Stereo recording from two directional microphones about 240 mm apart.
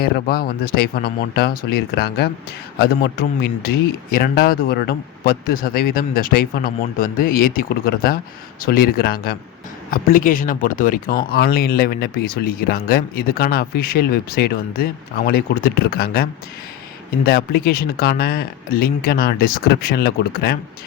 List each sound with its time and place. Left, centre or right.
0.0 s speech: left